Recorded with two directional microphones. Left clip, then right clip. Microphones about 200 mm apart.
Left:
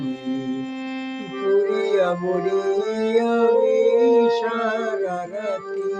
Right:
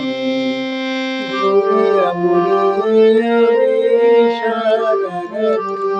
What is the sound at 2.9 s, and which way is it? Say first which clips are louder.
Music: right 13 dB; 55° right (ahead or behind).